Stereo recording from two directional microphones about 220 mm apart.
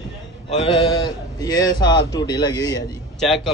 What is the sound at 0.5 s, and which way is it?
A man's voice, 25° left (ahead or behind).